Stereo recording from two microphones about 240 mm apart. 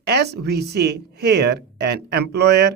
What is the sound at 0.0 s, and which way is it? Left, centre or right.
Speech, right.